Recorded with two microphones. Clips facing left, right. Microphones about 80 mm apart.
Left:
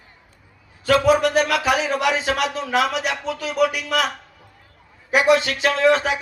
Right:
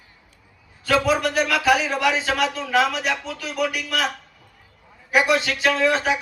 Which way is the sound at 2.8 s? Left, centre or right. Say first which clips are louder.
Even; centre.